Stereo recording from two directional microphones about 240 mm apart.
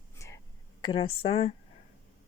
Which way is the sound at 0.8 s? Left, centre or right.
Left.